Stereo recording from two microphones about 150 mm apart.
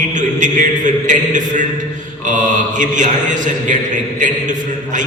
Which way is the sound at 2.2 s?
55° right (ahead or behind).